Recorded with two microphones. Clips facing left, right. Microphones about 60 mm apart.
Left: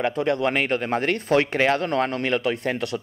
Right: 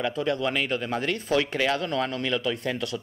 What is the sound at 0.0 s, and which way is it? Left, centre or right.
Speech, left.